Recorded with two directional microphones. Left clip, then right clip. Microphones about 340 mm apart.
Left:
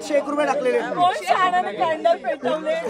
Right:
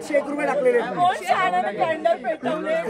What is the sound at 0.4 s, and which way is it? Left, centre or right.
Speech, centre.